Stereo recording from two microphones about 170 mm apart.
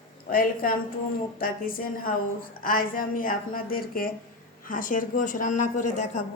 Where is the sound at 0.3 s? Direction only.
55° left (ahead or behind).